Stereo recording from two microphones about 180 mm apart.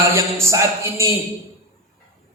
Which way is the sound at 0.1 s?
15° right (ahead or behind).